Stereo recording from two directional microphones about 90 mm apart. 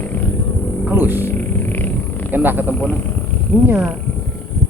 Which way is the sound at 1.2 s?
20° left (ahead or behind).